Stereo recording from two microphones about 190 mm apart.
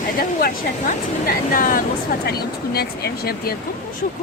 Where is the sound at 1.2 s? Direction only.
45° left (ahead or behind).